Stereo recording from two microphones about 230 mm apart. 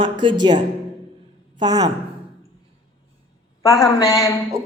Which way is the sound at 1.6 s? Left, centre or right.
Centre.